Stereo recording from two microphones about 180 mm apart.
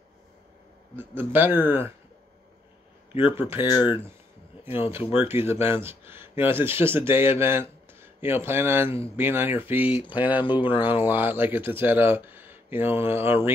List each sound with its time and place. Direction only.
0.9 s speech: 10° right (ahead or behind)
3.3 s speech: 10° right (ahead or behind)